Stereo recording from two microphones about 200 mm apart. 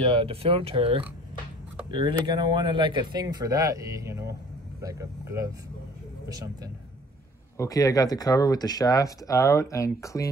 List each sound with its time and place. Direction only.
0.0 s a man's voice: 30° right (ahead or behind)
7.5 s speech: 15° left (ahead or behind)